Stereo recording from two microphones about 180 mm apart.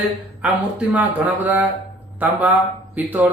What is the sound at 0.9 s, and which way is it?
Speech, 10° right (ahead or behind).